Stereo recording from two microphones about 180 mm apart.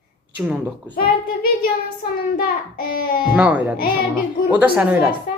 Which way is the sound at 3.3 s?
10° right (ahead or behind).